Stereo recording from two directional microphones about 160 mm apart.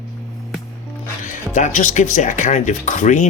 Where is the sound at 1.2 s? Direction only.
50° left (ahead or behind).